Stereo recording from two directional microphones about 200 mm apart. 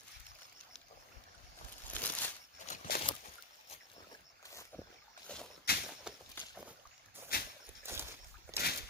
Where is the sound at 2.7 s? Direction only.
45° left (ahead or behind).